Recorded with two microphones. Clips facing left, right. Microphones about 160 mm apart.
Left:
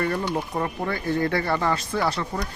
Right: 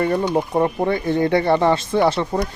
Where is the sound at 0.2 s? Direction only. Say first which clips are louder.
Right 8 dB; 30° right (ahead or behind).